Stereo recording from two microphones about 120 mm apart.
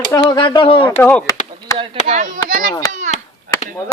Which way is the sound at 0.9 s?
20° left (ahead or behind).